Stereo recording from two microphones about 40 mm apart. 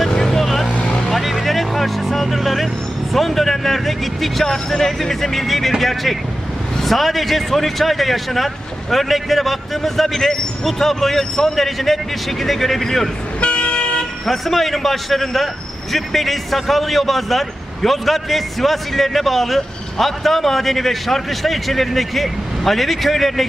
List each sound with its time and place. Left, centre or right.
0.0 s vehicle: centre
0.7 s vehicle: left
1.1 s vehicle: centre
3.1 s a man's voice: centre
13.4 s toot: left
14.3 s a man's voice: centre